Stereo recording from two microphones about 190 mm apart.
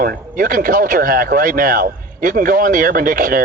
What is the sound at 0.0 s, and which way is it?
Speech, 45° right (ahead or behind).